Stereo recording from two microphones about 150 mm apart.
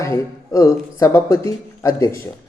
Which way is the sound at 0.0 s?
20° left (ahead or behind).